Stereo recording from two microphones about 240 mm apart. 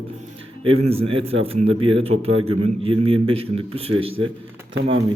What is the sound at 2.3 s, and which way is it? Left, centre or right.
Speech, right.